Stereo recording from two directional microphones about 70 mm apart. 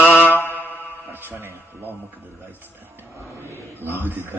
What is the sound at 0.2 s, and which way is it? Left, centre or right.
Mantra, left.